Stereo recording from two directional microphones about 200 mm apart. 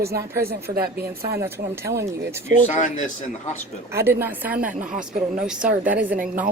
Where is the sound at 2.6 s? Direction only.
35° left (ahead or behind).